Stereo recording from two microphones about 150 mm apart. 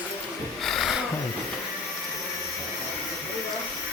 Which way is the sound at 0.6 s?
Centre (ahead or behind).